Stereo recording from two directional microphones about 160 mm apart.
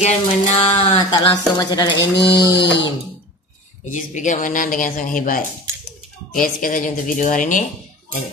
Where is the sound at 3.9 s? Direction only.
50° left (ahead or behind).